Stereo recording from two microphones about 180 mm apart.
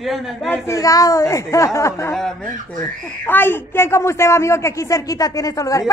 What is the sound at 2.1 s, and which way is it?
A man's voice, 5° left (ahead or behind).